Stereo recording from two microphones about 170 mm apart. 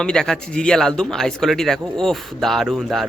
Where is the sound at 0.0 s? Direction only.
5° left (ahead or behind).